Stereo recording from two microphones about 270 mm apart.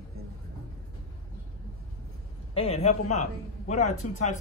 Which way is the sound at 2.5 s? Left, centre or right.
Left.